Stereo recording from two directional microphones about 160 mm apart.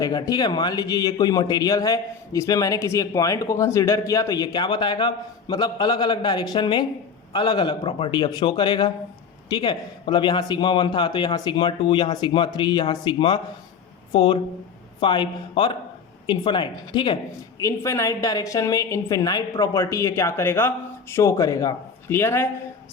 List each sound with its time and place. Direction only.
0.0 s speech: 25° left (ahead or behind)